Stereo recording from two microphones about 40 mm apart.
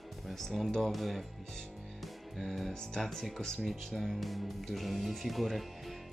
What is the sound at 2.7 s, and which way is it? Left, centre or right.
Speech, centre.